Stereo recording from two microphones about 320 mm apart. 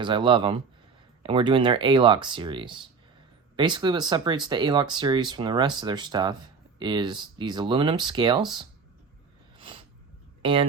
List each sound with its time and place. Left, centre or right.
0.0 s speech: centre
9.6 s a sound: centre
10.4 s speech: centre